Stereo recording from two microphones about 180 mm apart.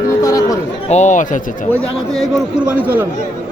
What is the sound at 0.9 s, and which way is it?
Speech, 40° left (ahead or behind).